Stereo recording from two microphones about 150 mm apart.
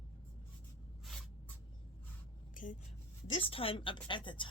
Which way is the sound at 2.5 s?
65° left (ahead or behind).